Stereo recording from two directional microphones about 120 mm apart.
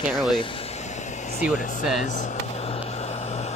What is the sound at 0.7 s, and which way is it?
Vehicle, 75° left (ahead or behind).